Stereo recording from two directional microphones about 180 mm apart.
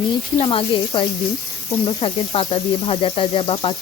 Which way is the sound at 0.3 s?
30° left (ahead or behind).